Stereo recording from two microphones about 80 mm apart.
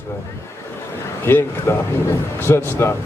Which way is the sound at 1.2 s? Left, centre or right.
Left.